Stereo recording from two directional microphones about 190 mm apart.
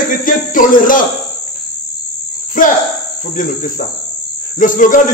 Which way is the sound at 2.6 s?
45° left (ahead or behind).